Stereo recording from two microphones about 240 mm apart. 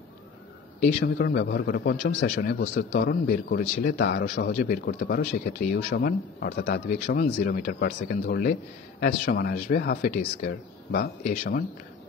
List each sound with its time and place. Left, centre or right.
0.8 s a man's voice: left